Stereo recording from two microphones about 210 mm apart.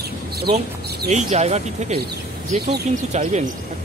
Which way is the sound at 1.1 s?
30° right (ahead or behind).